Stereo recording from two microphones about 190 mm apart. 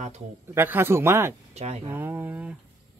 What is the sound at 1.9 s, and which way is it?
Speech, 10° right (ahead or behind).